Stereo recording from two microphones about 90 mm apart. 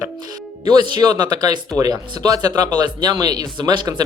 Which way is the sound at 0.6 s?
50° right (ahead or behind).